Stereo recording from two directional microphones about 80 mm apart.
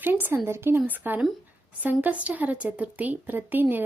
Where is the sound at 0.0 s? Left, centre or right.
Right.